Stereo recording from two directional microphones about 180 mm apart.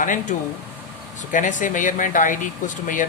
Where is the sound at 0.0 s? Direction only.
45° left (ahead or behind).